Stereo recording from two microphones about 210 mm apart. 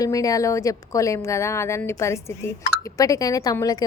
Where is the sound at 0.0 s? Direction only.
15° left (ahead or behind).